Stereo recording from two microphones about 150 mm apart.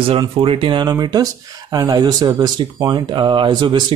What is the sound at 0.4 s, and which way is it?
Speech, 35° right (ahead or behind).